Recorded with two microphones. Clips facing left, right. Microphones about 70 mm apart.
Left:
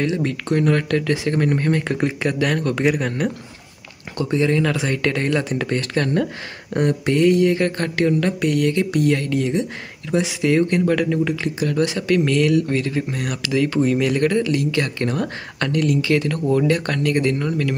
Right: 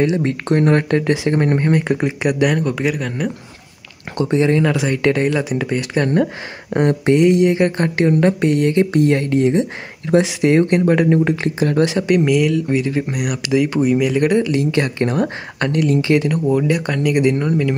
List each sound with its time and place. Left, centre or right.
0.0 s speech: right; by 3.3 s centre
4.2 s speech: right
4.7 s speech: centre
6.7 s speech: right
11.8 s speech: right
14.5 s speech: right